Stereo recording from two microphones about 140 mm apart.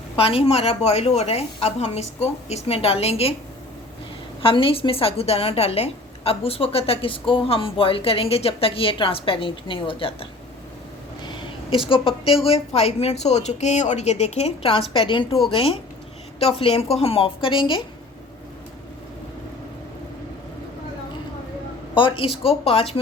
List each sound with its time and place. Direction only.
0.2 s a woman's voice: 40° left (ahead or behind)
4.4 s a woman's voice: 40° left (ahead or behind)
11.2 s a sound: 35° left (ahead or behind)
11.9 s a woman's voice: 40° left (ahead or behind)
21.9 s a woman's voice: 35° left (ahead or behind)